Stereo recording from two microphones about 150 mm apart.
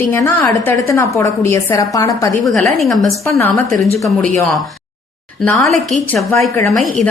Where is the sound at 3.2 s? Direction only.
20° left (ahead or behind).